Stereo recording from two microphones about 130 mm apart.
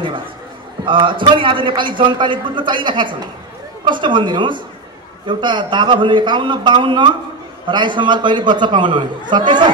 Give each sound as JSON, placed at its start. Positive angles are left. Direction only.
{"t": 0.8, "sound": "a man's voice", "side_deg": -40}